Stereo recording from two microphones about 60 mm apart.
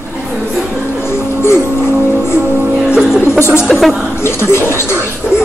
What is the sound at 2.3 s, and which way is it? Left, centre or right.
Music, right.